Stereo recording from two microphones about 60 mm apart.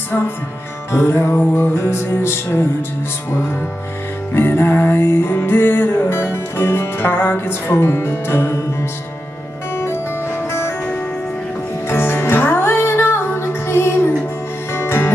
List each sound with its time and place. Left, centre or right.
0.9 s music: left
4.3 s music: left
11.9 s music: left